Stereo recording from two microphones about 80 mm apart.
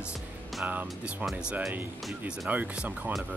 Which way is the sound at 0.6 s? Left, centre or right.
Centre.